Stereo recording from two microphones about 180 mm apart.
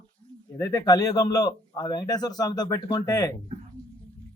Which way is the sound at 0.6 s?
20° left (ahead or behind).